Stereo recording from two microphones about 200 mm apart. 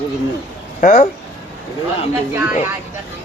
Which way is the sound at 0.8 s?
40° left (ahead or behind).